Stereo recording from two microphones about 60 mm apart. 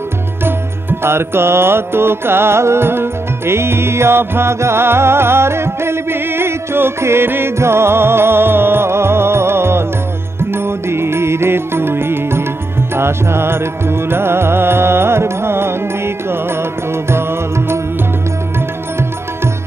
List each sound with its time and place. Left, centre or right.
0.5 s music: right
17.1 s music: right